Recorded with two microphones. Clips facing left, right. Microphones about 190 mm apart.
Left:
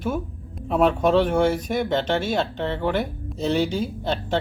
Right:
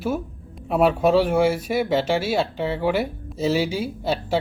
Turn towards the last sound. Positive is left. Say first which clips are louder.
# right 1 dB
turn(degrees=-10)  # may be behind; listen again after turning